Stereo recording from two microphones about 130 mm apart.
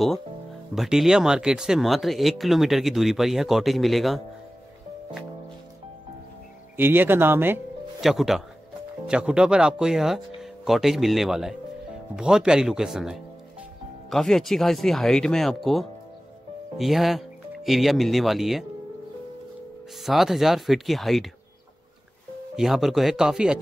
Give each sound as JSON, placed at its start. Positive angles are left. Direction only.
{"t": 0.7, "sound": "speech", "side_deg": -5}
{"t": 6.8, "sound": "speech", "side_deg": -15}
{"t": 8.0, "sound": "speech", "side_deg": 0}
{"t": 20.0, "sound": "speech", "side_deg": 0}
{"t": 22.6, "sound": "speech", "side_deg": 0}